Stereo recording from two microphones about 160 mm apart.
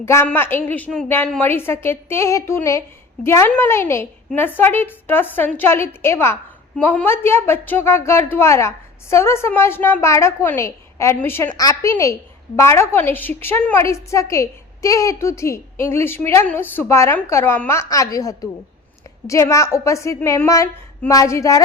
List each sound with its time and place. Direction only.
0.0 s a woman's voice: 15° left (ahead or behind)